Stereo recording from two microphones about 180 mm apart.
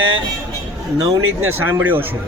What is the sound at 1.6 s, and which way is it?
Speech, 10° right (ahead or behind).